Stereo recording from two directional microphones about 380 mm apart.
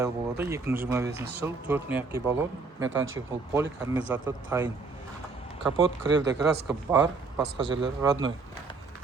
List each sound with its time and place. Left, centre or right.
0.0 s speech: centre
2.8 s speech: right
3.5 s speech: centre
5.8 s speech: right
6.4 s speech: centre
7.6 s speech: right
8.0 s speech: centre